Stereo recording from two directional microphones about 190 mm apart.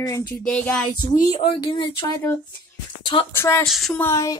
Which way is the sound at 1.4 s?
30° left (ahead or behind).